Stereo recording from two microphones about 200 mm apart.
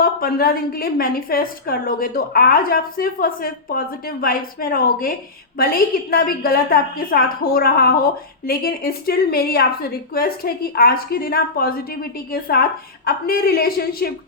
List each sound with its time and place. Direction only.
0.0 s a woman's voice: 50° left (ahead or behind)